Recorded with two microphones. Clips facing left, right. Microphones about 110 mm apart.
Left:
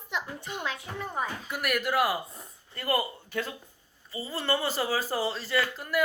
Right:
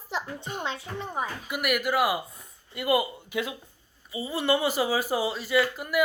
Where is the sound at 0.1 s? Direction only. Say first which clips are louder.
Right 2 dB; 35° right (ahead or behind).